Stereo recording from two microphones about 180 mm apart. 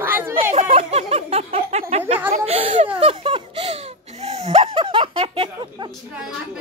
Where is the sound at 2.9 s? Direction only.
30° right (ahead or behind).